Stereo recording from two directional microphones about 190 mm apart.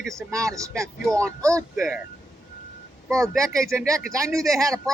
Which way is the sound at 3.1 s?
15° right (ahead or behind).